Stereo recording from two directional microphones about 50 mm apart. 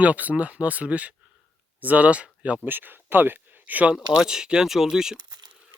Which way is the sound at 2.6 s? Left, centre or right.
Right.